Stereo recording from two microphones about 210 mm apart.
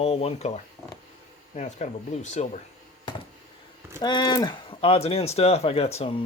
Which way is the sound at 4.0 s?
20° left (ahead or behind).